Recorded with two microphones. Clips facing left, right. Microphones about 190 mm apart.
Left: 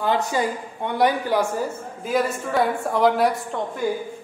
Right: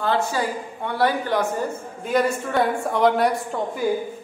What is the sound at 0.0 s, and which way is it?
A man's voice, 15° left (ahead or behind).